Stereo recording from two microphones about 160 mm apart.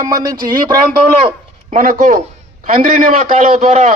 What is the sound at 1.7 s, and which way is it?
A man's voice, 55° right (ahead or behind).